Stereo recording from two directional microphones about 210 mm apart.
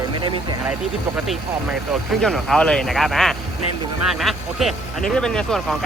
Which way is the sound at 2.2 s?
5° left (ahead or behind).